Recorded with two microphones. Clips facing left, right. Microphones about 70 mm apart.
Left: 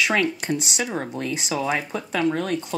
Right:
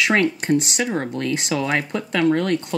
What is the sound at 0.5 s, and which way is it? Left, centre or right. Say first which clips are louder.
Speech: right 5 dB; right.